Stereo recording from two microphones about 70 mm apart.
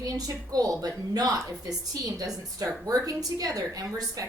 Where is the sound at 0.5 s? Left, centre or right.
Right.